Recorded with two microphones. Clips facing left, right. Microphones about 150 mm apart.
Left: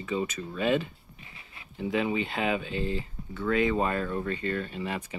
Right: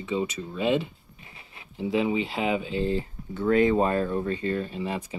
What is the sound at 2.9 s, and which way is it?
Speech, 30° right (ahead or behind).